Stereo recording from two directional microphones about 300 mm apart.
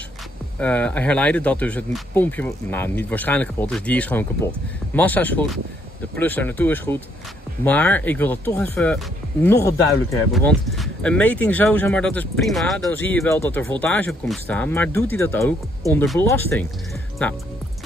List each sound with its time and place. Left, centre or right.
0.6 s speech: centre